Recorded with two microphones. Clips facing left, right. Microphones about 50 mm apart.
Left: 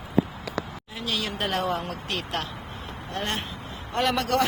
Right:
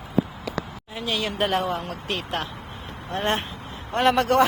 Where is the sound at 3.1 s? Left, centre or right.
Right.